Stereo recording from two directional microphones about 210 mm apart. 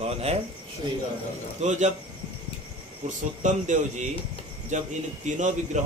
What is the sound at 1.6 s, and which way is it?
Speech, 35° right (ahead or behind).